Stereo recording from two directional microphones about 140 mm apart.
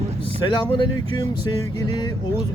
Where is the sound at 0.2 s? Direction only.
45° right (ahead or behind).